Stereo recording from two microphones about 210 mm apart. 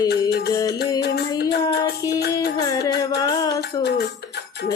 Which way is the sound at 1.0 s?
50° left (ahead or behind).